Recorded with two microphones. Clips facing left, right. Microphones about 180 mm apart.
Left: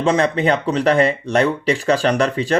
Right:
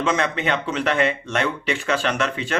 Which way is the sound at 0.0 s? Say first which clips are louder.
Left 6 dB; 35° left (ahead or behind).